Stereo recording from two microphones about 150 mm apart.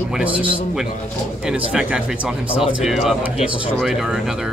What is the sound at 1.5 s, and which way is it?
Speech, 5° right (ahead or behind).